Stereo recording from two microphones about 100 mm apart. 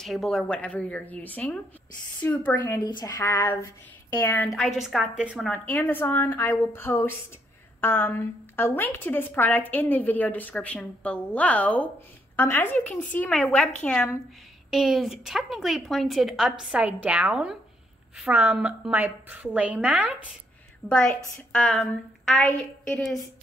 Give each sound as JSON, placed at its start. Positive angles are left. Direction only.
{"t": 0.0, "sound": "a woman's voice", "side_deg": 0}
{"t": 2.8, "sound": "a woman's voice", "side_deg": 45}
{"t": 3.2, "sound": "speech", "side_deg": 25}
{"t": 4.6, "sound": "a woman's voice", "side_deg": -5}
{"t": 5.7, "sound": "a woman's voice", "side_deg": 20}
{"t": 13.3, "sound": "a woman's voice", "side_deg": 5}
{"t": 14.7, "sound": "a woman's voice", "side_deg": 0}
{"t": 21.1, "sound": "a woman's voice", "side_deg": 20}